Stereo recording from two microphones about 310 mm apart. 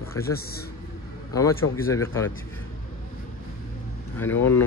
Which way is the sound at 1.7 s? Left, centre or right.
Centre.